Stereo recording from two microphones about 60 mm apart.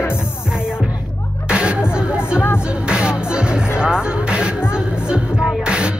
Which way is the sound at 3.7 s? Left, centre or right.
Centre.